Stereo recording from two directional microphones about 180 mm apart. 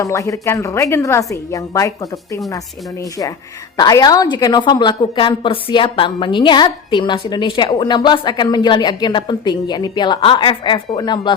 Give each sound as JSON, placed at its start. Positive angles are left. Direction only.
{"t": 0.0, "sound": "a woman's voice", "side_deg": 15}